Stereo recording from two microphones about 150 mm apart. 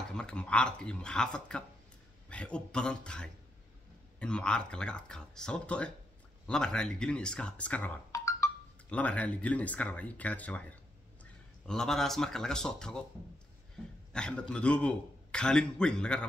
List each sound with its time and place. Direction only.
0.1 s a man's voice: 5° left (ahead or behind)
8.1 s music: 20° left (ahead or behind)
8.9 s a man's voice: 10° left (ahead or behind)
14.1 s a man's voice: 5° left (ahead or behind)